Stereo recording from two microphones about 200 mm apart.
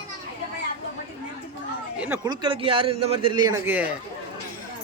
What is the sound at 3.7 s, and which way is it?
Speech, 10° right (ahead or behind).